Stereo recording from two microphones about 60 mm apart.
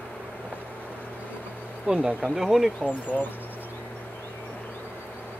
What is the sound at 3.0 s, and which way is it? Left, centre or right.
Speech, left.